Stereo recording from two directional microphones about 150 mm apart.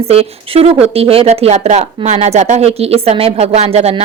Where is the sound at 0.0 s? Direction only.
40° right (ahead or behind).